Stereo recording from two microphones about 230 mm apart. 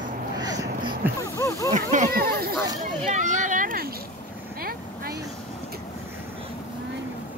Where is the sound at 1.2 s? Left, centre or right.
Centre.